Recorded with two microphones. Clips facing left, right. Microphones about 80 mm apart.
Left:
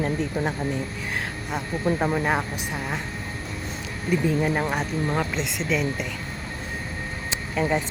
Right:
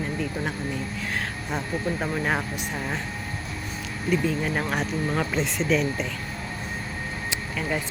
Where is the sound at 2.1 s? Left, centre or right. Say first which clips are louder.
Left 2 dB; centre.